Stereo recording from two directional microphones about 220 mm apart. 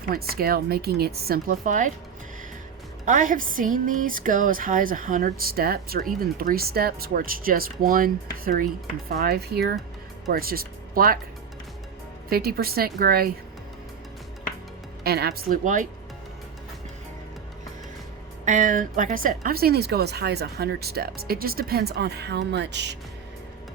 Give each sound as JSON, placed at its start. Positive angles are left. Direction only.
{"t": 0.1, "sound": "speech", "side_deg": -45}
{"t": 3.1, "sound": "speech", "side_deg": -35}
{"t": 12.3, "sound": "speech", "side_deg": -45}
{"t": 15.0, "sound": "speech", "side_deg": -45}
{"t": 18.4, "sound": "speech", "side_deg": -35}